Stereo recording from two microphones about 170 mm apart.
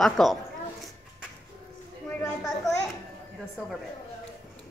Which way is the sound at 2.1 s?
5° left (ahead or behind).